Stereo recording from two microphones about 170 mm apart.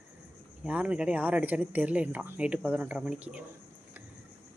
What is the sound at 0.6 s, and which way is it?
Speech, 5° right (ahead or behind).